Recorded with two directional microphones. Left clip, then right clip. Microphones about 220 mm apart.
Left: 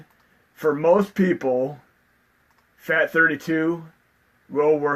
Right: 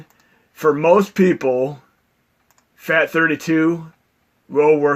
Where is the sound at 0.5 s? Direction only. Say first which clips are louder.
Right 5 dB; 40° right (ahead or behind).